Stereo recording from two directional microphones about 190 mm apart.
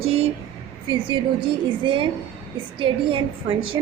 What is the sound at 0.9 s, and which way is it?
A woman's voice, 25° right (ahead or behind).